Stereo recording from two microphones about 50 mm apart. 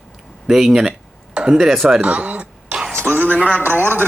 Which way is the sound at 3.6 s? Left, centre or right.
Right.